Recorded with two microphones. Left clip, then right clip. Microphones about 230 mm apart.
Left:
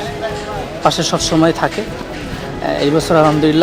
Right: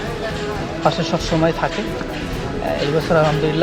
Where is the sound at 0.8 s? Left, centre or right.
Left.